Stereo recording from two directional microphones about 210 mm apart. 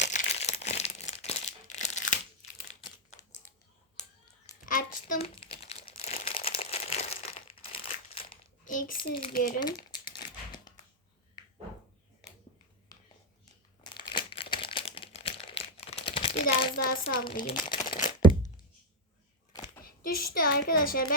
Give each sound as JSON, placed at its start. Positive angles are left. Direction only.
{"t": 0.0, "sound": "crumpling", "side_deg": 35}
{"t": 4.6, "sound": "a sound", "side_deg": 40}
{"t": 5.2, "sound": "crumpling", "side_deg": 25}
{"t": 8.6, "sound": "a sound", "side_deg": 40}
{"t": 9.3, "sound": "speech", "side_deg": 45}
{"t": 9.6, "sound": "crumpling", "side_deg": 20}
{"t": 12.9, "sound": "a sound", "side_deg": 20}
{"t": 13.8, "sound": "crumpling", "side_deg": 20}
{"t": 17.2, "sound": "speech", "side_deg": 25}
{"t": 19.8, "sound": "a child's voice", "side_deg": 45}